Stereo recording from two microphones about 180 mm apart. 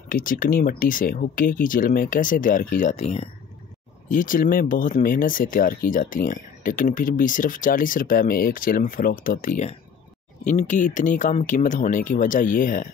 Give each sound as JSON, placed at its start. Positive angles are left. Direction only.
{"t": 0.1, "sound": "speech", "side_deg": 50}
{"t": 4.1, "sound": "speech", "side_deg": 50}